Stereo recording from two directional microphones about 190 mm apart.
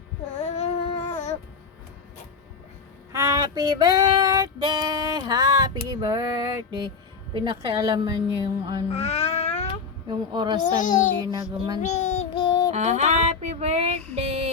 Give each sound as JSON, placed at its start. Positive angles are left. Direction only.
{"t": 0.3, "sound": "child singing", "side_deg": 35}
{"t": 3.1, "sound": "child singing", "side_deg": -20}
{"t": 5.9, "sound": "a woman's voice", "side_deg": -20}
{"t": 8.9, "sound": "music", "side_deg": 30}
{"t": 10.1, "sound": "a woman's voice", "side_deg": -25}
{"t": 10.8, "sound": "a child's voice", "side_deg": 45}
{"t": 11.2, "sound": "a woman's voice", "side_deg": -20}
{"t": 11.8, "sound": "child singing", "side_deg": 40}
{"t": 12.7, "sound": "music", "side_deg": -35}